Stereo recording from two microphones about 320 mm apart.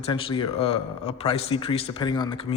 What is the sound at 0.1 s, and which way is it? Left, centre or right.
A man's voice, centre.